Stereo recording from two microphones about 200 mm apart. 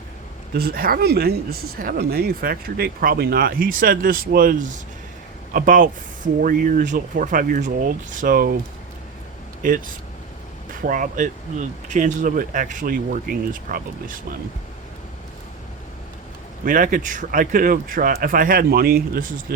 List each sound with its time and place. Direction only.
0.5 s speech: 50° right (ahead or behind)
9.6 s speech: 45° right (ahead or behind)
16.6 s speech: 45° right (ahead or behind)